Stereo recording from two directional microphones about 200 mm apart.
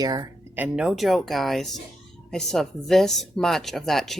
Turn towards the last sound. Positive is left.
turn(degrees=0)  # may be behind; listen again after turning